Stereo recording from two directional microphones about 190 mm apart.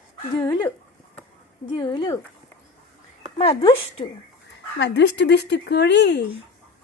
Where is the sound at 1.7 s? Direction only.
25° left (ahead or behind).